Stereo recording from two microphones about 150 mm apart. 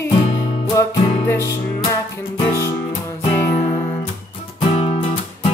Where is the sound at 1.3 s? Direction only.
20° left (ahead or behind).